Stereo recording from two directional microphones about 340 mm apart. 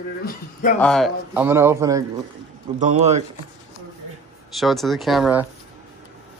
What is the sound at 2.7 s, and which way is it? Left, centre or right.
Speech, right.